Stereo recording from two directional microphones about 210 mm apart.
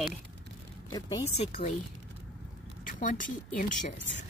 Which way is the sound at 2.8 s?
40° left (ahead or behind).